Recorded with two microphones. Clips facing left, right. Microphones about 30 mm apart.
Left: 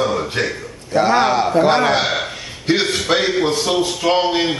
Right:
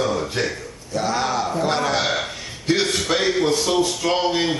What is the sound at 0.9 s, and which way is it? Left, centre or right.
A man's voice, left.